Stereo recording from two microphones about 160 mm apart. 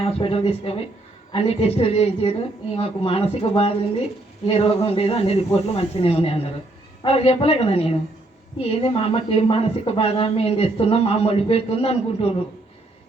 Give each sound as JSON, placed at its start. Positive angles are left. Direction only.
{"t": 0.0, "sound": "speech", "side_deg": 35}